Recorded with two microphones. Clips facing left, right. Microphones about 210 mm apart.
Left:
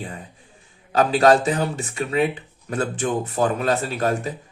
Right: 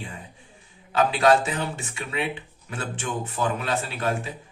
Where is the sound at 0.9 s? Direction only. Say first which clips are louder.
Left 4 dB; 40° left (ahead or behind).